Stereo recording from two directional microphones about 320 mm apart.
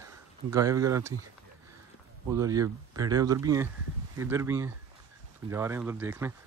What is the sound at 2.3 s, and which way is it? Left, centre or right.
Speech, centre.